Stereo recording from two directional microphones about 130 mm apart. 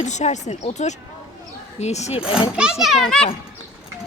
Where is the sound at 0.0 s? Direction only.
60° left (ahead or behind).